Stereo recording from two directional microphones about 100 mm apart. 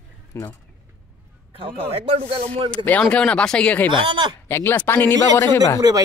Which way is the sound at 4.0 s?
45° right (ahead or behind).